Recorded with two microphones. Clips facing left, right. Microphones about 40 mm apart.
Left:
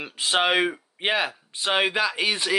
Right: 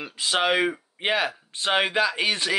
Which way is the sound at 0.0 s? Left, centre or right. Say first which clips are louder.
Left 1 dB; left.